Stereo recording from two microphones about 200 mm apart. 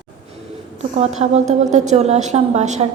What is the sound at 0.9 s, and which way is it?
A woman's voice, 35° right (ahead or behind).